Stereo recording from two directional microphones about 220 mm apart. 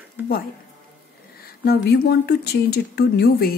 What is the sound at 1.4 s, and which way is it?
Speech, 45° left (ahead or behind).